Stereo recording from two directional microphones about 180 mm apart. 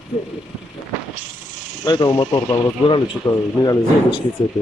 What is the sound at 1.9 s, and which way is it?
Speech, 20° left (ahead or behind).